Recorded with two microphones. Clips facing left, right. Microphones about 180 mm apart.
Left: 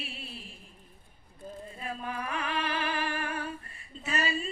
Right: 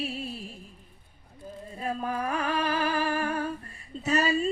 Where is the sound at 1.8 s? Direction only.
40° right (ahead or behind).